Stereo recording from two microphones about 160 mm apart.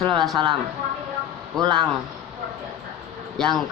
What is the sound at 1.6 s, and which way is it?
Speech, 30° right (ahead or behind).